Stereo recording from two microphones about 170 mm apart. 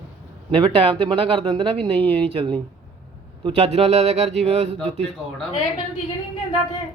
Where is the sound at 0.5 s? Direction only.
35° right (ahead or behind).